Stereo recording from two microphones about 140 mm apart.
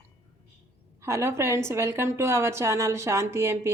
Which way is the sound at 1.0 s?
20° right (ahead or behind).